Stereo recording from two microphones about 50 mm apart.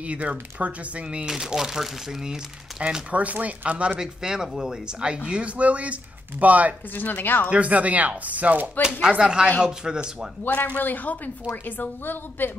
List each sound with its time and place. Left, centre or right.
0.0 s speech: right
1.2 s speech: centre
2.8 s speech: right
4.0 s speech: centre; by 6.7 s right
7.0 s a woman's voice: left
7.4 s speech: right
9.2 s speech: centre
10.4 s a woman's voice: left